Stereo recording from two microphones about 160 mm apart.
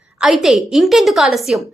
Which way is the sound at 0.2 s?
Centre (ahead or behind).